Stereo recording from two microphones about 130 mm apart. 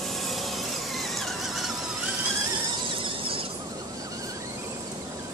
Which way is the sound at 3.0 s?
45° right (ahead or behind).